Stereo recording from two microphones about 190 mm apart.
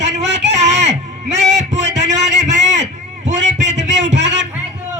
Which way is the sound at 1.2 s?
65° right (ahead or behind).